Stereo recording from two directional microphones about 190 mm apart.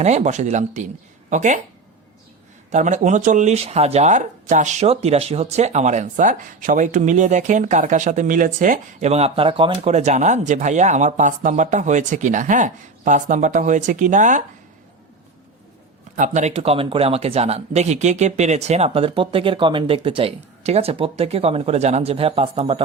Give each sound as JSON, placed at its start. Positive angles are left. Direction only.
{"t": 0.0, "sound": "speech", "side_deg": -35}
{"t": 2.7, "sound": "speech", "side_deg": -40}
{"t": 16.1, "sound": "speech", "side_deg": -40}